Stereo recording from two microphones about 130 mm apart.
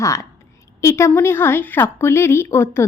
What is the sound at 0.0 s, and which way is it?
A woman's voice, 25° left (ahead or behind).